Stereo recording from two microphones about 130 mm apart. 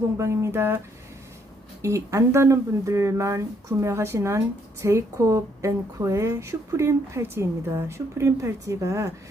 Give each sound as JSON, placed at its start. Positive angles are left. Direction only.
{"t": 0.2, "sound": "speech", "side_deg": -20}
{"t": 1.8, "sound": "speech", "side_deg": -25}